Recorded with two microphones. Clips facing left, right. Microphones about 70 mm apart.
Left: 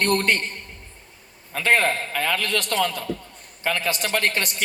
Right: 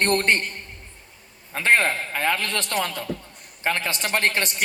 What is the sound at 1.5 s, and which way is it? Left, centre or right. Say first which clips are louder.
A man's voice: even; right.